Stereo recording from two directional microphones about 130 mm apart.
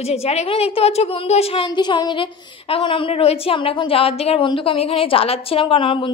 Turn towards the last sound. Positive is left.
turn(degrees=45)  # may be behind; listen again after turning